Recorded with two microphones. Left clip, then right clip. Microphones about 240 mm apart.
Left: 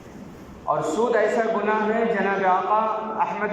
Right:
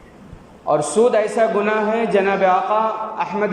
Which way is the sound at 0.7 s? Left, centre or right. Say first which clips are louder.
Right 6 dB; right.